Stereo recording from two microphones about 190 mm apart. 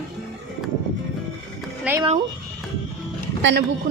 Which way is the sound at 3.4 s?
75° right (ahead or behind).